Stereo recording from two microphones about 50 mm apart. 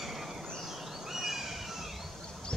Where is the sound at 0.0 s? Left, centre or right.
Centre.